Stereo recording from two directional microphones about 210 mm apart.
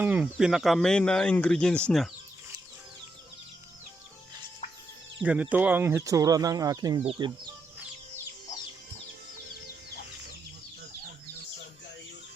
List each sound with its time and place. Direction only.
0.0 s speech: 5° right (ahead or behind)
5.2 s speech: 5° right (ahead or behind); by 7.3 s 25° right (ahead or behind)